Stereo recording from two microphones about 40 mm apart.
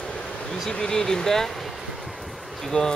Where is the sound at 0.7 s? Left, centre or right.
Centre.